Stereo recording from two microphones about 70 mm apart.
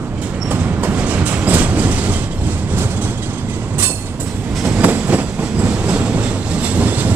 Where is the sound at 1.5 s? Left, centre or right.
Right.